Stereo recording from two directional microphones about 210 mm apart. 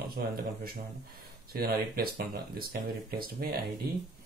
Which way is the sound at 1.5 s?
45° right (ahead or behind).